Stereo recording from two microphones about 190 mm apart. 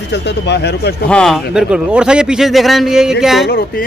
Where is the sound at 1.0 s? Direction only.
5° left (ahead or behind).